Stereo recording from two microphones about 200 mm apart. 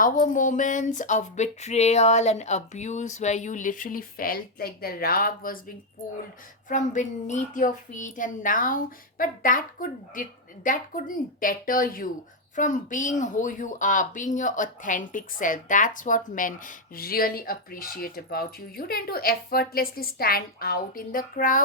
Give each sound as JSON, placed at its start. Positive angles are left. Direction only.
{"t": 0.0, "sound": "speech", "side_deg": 40}
{"t": 6.7, "sound": "a child's voice", "side_deg": 40}